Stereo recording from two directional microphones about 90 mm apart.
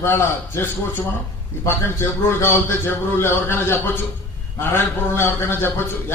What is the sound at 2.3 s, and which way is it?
A man's voice, 25° left (ahead or behind).